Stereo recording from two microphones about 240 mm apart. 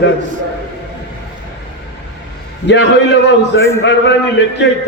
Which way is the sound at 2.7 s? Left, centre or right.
Left.